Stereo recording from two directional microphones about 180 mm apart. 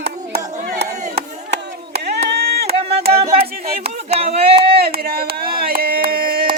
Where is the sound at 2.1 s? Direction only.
65° right (ahead or behind).